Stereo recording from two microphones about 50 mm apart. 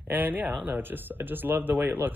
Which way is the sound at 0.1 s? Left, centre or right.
Right.